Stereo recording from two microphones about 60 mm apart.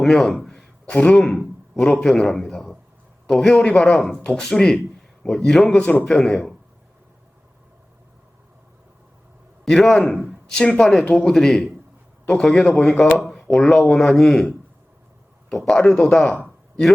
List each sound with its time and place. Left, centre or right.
0.0 s speech: centre
0.9 s a man's voice: centre
1.7 s speech: centre
4.2 s a man's voice: centre
5.7 s a man's voice: left
6.1 s speech: centre
9.6 s a man's voice: centre
12.2 s a man's voice: centre
12.5 s speech: centre
15.6 s a man's voice: centre